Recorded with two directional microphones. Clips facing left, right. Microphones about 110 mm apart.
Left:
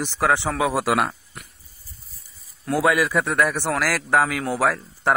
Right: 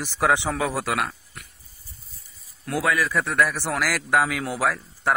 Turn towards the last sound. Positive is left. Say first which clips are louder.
# left 3 dB
turn(degrees=5)  # may be behind; listen again after turning